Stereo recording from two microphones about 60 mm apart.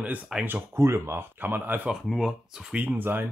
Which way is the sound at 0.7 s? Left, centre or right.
Right.